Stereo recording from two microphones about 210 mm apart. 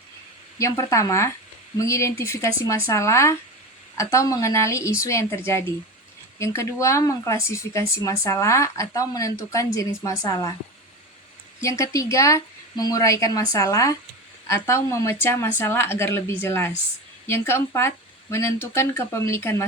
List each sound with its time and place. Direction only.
0.6 s speech: 15° left (ahead or behind)
6.4 s speech: 15° left (ahead or behind)
11.6 s speech: 15° left (ahead or behind)